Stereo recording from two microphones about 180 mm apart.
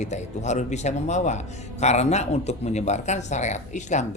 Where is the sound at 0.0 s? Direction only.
40° left (ahead or behind).